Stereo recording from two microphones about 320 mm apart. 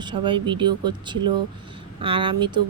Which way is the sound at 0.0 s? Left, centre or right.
Centre.